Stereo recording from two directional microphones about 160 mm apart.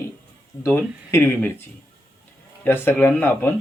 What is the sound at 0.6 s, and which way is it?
Speech, 15° left (ahead or behind).